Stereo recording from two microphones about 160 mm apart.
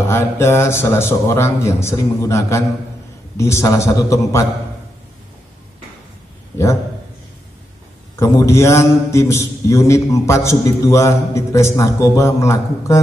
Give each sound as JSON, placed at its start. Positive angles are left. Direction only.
{"t": 0.1, "sound": "a man's voice", "side_deg": 15}
{"t": 8.2, "sound": "a man's voice", "side_deg": 15}